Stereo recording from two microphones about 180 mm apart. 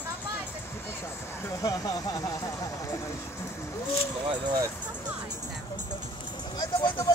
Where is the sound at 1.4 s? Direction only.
20° left (ahead or behind).